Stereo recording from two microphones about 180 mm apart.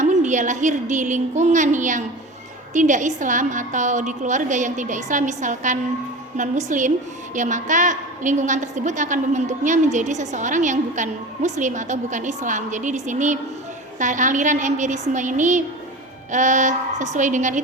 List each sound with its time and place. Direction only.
0.0 s a woman's voice: 40° right (ahead or behind)